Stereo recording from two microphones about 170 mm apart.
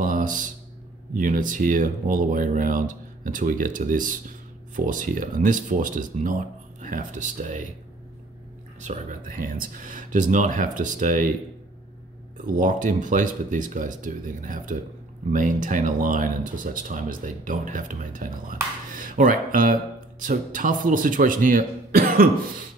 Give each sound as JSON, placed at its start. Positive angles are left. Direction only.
{"t": 0.0, "sound": "a sound", "side_deg": -50}
{"t": 1.1, "sound": "speech", "side_deg": -50}
{"t": 8.8, "sound": "speech", "side_deg": -45}
{"t": 12.4, "sound": "speech", "side_deg": -50}